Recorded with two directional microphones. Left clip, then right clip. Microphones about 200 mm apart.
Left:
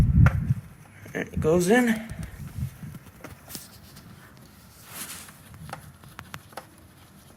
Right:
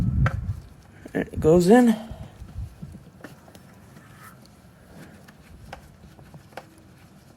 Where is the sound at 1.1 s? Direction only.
30° right (ahead or behind).